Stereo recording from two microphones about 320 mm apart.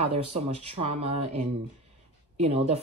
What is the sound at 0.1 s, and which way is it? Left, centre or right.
Speech, centre.